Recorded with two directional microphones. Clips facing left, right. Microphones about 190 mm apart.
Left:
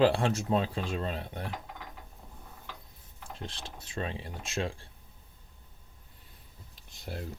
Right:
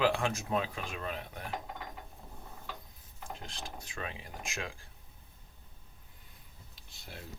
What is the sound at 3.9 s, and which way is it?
Speech, 30° left (ahead or behind).